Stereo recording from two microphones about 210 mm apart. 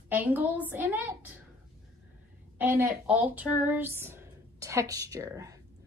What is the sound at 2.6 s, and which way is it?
Speech, 10° right (ahead or behind).